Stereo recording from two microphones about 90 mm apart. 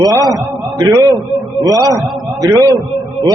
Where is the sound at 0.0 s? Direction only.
40° right (ahead or behind).